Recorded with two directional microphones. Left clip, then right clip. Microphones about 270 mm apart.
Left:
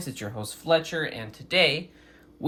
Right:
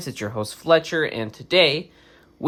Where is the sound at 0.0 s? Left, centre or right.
Right.